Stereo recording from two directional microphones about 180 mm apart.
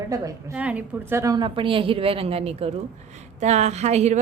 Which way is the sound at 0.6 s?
5° right (ahead or behind).